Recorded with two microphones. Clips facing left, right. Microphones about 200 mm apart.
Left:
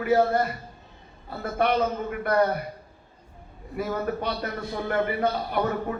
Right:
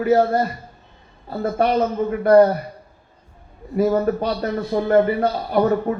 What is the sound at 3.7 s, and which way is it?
A man's voice, 35° right (ahead or behind).